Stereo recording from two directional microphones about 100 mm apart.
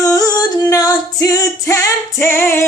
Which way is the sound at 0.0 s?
35° left (ahead or behind).